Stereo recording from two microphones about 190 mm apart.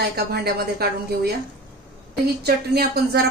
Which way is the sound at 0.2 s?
55° right (ahead or behind).